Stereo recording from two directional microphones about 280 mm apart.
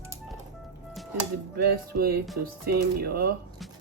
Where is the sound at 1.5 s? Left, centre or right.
Right.